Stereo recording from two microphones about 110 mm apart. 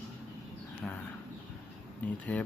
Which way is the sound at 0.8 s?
15° left (ahead or behind).